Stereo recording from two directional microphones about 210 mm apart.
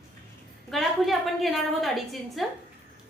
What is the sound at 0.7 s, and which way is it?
A woman's voice, centre (ahead or behind).